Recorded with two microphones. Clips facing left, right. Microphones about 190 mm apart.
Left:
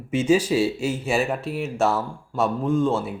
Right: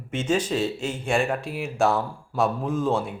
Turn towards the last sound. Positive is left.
turn(degrees=0)  # may be behind; listen again after turning